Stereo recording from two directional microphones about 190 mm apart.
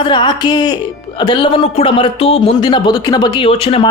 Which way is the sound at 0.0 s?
25° left (ahead or behind).